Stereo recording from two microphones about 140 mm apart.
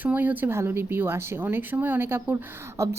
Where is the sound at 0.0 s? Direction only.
10° right (ahead or behind).